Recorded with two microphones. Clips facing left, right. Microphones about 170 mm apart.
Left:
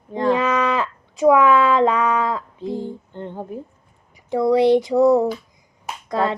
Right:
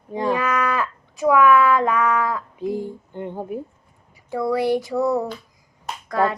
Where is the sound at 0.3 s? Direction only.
20° left (ahead or behind).